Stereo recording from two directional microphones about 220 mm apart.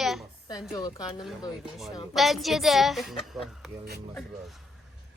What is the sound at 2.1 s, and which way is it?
A child's voice, centre (ahead or behind).